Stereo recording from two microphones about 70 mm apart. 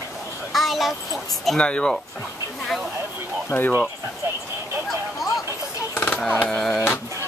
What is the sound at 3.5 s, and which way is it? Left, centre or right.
Speech, left.